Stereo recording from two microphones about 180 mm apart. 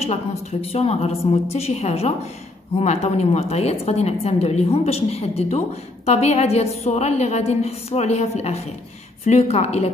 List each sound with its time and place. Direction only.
0.0 s a woman's voice: 35° left (ahead or behind)